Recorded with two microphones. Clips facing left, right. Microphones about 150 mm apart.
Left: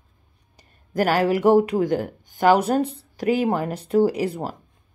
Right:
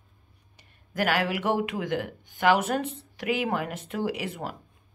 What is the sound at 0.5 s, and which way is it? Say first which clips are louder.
Speech: left 7 dB; 40° left (ahead or behind).